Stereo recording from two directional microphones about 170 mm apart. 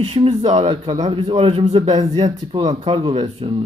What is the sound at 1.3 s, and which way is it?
Speech, 30° right (ahead or behind).